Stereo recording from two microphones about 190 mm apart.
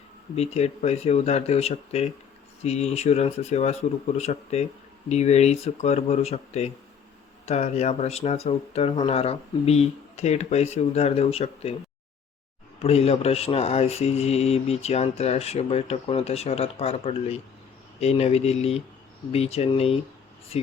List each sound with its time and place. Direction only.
0.3 s speech: 35° left (ahead or behind)
12.8 s speech: 30° left (ahead or behind)